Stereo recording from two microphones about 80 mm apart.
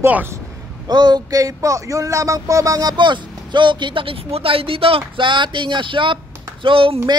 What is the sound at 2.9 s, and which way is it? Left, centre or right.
Speech, right.